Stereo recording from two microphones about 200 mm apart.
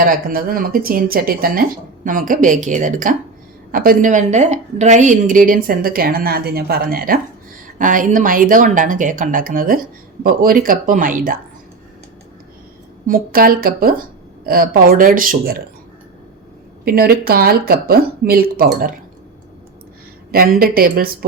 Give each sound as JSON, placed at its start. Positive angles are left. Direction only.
{"t": 0.0, "sound": "a woman's voice", "side_deg": -45}
{"t": 13.1, "sound": "a woman's voice", "side_deg": -45}
{"t": 16.8, "sound": "a woman's voice", "side_deg": -50}
{"t": 20.3, "sound": "a woman's voice", "side_deg": -45}